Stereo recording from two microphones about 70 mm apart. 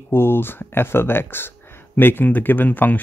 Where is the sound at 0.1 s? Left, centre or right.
Left.